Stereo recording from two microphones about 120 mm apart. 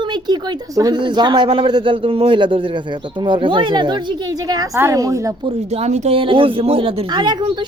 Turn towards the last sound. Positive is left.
turn(degrees=-40)  # may be behind; listen again after turning